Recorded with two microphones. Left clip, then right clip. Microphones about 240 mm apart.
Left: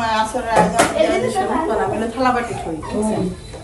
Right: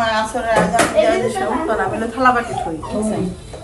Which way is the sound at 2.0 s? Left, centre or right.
Centre.